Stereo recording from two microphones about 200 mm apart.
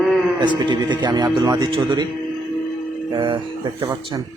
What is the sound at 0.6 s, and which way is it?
Speech, 20° right (ahead or behind).